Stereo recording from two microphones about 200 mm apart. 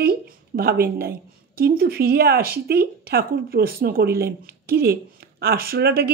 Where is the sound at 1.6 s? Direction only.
50° right (ahead or behind).